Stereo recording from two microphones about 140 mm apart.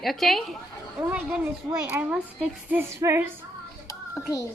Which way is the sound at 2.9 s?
20° right (ahead or behind).